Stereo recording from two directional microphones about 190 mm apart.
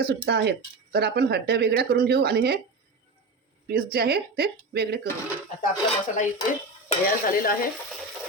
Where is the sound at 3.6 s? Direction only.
55° right (ahead or behind).